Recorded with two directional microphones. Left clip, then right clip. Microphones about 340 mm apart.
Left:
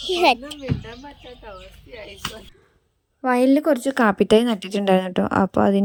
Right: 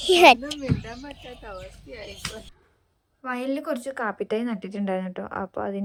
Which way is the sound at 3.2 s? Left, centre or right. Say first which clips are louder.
Left 11 dB; centre.